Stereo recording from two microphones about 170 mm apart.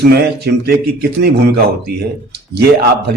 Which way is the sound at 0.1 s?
70° right (ahead or behind).